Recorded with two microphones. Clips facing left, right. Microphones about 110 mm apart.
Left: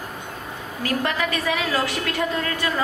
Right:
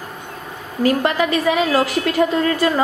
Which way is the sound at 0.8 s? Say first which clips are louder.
Right 8 dB; 30° right (ahead or behind).